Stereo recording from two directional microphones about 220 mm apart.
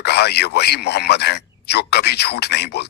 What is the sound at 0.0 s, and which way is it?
Speech, 50° left (ahead or behind).